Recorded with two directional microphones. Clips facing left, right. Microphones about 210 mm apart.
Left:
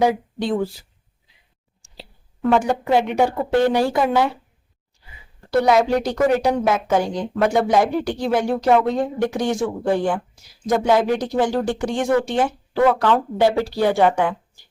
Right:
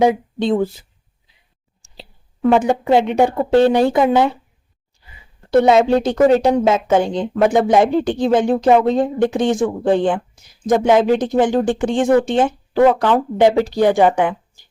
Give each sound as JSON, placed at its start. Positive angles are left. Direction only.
{"t": 0.0, "sound": "a woman's voice", "side_deg": -20}
{"t": 2.5, "sound": "a woman's voice", "side_deg": -20}
{"t": 5.5, "sound": "a woman's voice", "side_deg": -25}